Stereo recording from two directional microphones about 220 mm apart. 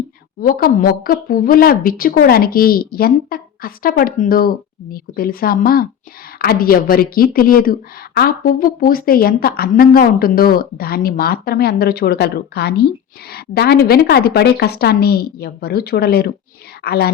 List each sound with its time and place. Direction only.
0.4 s a woman's voice: 40° left (ahead or behind)